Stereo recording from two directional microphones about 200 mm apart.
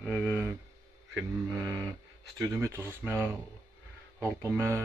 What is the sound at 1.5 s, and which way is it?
Speech, 15° right (ahead or behind).